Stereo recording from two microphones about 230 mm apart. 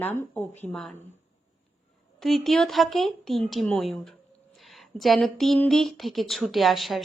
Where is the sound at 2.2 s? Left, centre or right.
Centre.